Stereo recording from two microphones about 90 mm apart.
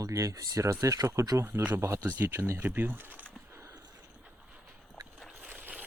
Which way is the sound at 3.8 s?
45° right (ahead or behind).